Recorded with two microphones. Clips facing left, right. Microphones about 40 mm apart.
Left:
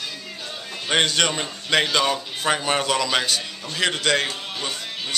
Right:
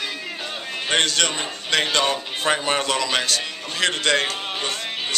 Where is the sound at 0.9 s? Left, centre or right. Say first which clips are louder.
Left 1 dB; centre.